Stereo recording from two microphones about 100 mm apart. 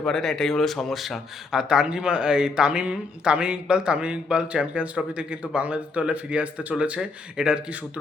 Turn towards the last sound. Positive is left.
turn(degrees=-10)  # may be behind; listen again after turning